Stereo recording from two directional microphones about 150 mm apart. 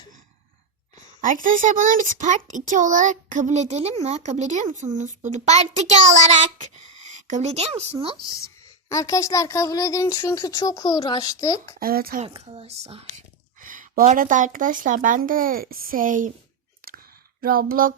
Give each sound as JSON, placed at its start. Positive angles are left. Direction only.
{"t": 1.2, "sound": "a child's voice", "side_deg": -60}
{"t": 8.9, "sound": "speech", "side_deg": 20}
{"t": 11.8, "sound": "speech", "side_deg": -85}
{"t": 12.2, "sound": "speech", "side_deg": -40}
{"t": 13.6, "sound": "a child's voice", "side_deg": -60}
{"t": 17.4, "sound": "child singing", "side_deg": -75}